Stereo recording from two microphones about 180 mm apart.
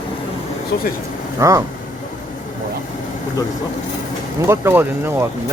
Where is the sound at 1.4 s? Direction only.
20° right (ahead or behind).